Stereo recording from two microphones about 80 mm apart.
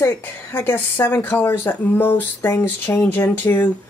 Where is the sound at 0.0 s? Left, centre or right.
Left.